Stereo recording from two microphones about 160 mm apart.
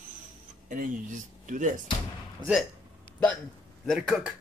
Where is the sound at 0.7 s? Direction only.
55° right (ahead or behind).